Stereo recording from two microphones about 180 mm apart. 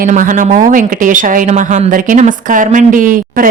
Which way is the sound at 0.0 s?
45° right (ahead or behind).